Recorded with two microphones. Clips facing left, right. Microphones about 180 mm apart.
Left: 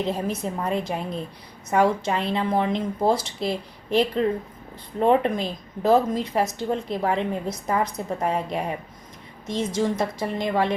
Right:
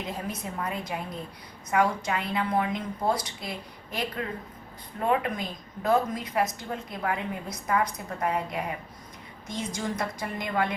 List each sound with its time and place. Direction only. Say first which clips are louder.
0.0 s a woman's voice: left 8 dB; 30° left (ahead or behind)